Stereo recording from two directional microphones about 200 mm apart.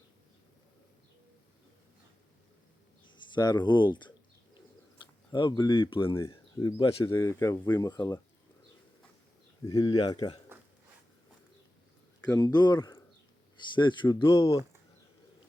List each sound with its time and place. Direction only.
3.0 s speech: 20° left (ahead or behind)
5.3 s speech: 20° left (ahead or behind)
9.6 s speech: 20° left (ahead or behind)
12.4 s speech: 20° left (ahead or behind)